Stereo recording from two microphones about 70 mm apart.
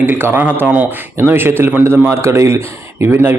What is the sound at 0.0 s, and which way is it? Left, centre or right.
Speech, right.